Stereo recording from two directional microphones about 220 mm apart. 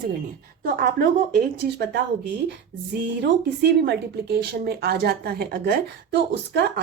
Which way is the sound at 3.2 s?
50° right (ahead or behind).